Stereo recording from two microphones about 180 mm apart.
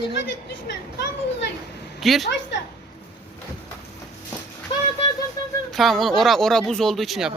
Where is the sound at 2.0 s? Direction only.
Centre (ahead or behind).